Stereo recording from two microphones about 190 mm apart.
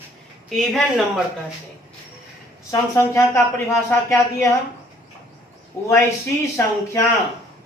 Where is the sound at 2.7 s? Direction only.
15° left (ahead or behind).